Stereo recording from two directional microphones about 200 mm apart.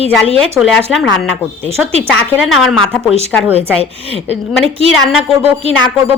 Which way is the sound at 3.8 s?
30° right (ahead or behind).